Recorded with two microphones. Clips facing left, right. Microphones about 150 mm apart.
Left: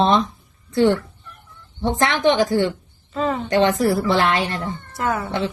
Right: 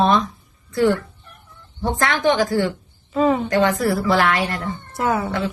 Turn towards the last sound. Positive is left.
turn(degrees=-10)  # may be behind; listen again after turning